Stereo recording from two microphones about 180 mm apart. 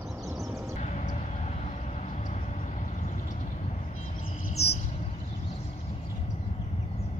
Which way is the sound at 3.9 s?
40° left (ahead or behind).